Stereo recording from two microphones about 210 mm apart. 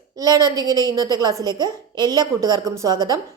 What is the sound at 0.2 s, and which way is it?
A woman's voice, 15° right (ahead or behind).